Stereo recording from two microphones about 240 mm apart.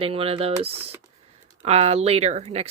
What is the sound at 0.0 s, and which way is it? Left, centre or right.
Speech, right.